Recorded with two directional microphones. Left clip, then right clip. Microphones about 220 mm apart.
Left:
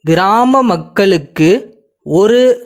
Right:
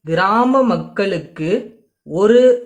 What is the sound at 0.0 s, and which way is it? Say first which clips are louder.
Speech: left 5 dB; 45° left (ahead or behind).